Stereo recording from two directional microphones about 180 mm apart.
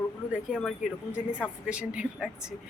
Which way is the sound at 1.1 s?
5° right (ahead or behind).